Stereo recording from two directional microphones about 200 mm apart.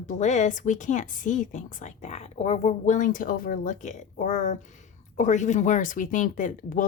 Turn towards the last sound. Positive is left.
turn(degrees=40)  # may be behind; listen again after turning